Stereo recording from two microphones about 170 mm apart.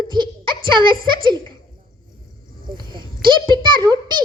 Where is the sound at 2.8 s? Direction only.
25° right (ahead or behind).